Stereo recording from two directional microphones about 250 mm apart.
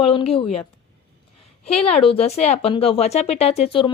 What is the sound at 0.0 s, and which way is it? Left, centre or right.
Speech, left.